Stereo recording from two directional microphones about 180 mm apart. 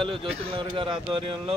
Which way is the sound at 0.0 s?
30° right (ahead or behind).